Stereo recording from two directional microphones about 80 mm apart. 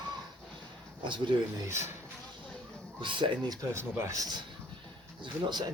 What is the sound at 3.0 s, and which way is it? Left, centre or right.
Speech, right.